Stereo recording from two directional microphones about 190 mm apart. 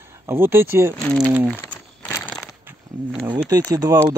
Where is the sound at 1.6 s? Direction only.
15° left (ahead or behind).